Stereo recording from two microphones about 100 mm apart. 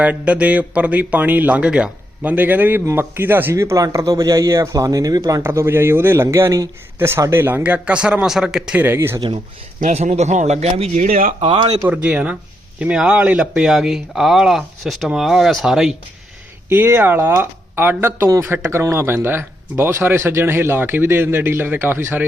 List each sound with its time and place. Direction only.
0.0 s a man's voice: 15° right (ahead or behind); by 5.4 s 35° right (ahead or behind)
5.4 s a man's voice: 25° right (ahead or behind); by 8.8 s 5° right (ahead or behind)
8.8 s a man's voice: 20° right (ahead or behind)
9.9 s speech: 90° right
11.4 s speech: 55° right (ahead or behind)
11.9 s a man's voice: 10° right (ahead or behind)
13.5 s speech: 5° right (ahead or behind)
16.6 s a man's voice: 25° right (ahead or behind)